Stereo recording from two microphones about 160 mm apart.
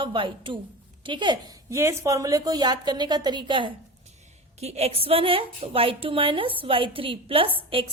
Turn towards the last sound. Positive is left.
turn(degrees=-35)  # may be behind; listen again after turning